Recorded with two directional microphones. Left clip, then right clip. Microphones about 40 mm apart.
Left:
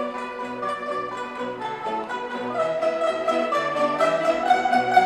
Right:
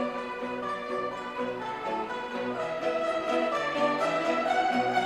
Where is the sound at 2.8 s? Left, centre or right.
Left.